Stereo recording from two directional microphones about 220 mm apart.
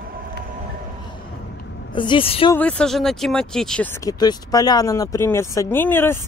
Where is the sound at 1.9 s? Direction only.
20° left (ahead or behind).